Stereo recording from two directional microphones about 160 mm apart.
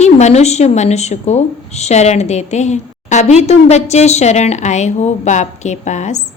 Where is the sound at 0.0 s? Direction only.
45° left (ahead or behind).